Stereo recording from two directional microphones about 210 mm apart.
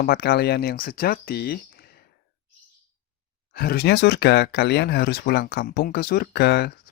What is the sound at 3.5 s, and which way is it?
Speech, 50° left (ahead or behind).